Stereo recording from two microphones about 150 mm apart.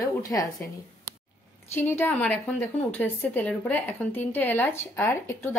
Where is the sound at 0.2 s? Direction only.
25° left (ahead or behind).